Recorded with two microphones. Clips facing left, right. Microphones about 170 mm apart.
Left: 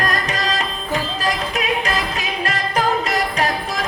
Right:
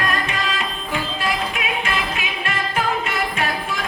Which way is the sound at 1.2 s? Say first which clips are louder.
Left 2 dB; 40° left (ahead or behind).